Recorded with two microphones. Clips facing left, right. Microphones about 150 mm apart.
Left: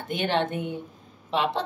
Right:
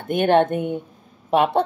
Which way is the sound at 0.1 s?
55° right (ahead or behind).